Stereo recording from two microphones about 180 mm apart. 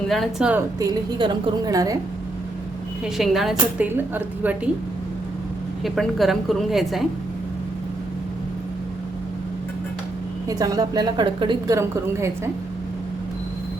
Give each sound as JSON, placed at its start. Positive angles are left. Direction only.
{"t": 0.1, "sound": "a woman's voice", "side_deg": 0}
{"t": 0.8, "sound": "a woman's voice", "side_deg": -25}
{"t": 3.2, "sound": "a woman's voice", "side_deg": 0}
{"t": 5.8, "sound": "a woman's voice", "side_deg": 0}
{"t": 10.5, "sound": "a woman's voice", "side_deg": -20}